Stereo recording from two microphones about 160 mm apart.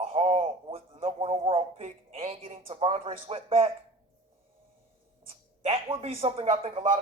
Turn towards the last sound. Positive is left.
turn(degrees=-35)  # may be behind; listen again after turning